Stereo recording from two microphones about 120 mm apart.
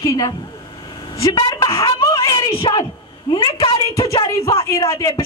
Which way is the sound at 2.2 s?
35° left (ahead or behind).